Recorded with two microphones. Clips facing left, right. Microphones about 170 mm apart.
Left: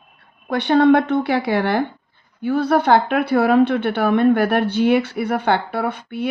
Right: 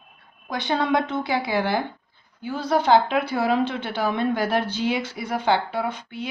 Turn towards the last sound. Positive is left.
turn(degrees=60)  # may be behind; listen again after turning